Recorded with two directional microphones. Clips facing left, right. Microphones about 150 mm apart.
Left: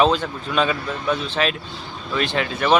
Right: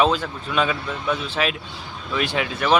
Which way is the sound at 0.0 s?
5° right (ahead or behind).